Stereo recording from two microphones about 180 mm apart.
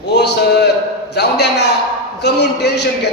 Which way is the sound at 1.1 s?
70° left (ahead or behind).